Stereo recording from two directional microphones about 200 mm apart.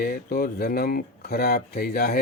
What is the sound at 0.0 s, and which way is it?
Speech, 50° left (ahead or behind).